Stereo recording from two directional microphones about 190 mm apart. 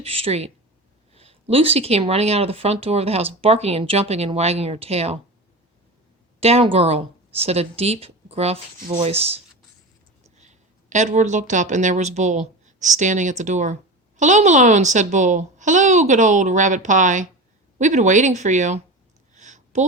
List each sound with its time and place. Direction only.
0.0 s a child's voice: 30° right (ahead or behind)
6.4 s a child's voice: 30° right (ahead or behind)
19.3 s a sound: 40° right (ahead or behind)